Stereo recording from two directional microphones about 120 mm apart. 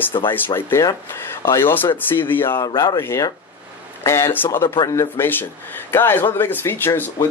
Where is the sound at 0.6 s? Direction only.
20° left (ahead or behind).